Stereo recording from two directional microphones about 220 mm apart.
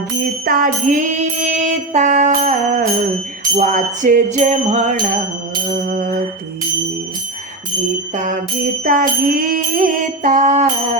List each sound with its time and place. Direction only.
0.4 s music: 40° right (ahead or behind)
5.7 s a sound: 40° right (ahead or behind)
8.1 s music: 35° right (ahead or behind)